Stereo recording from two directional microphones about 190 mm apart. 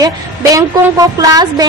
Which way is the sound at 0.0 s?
15° right (ahead or behind).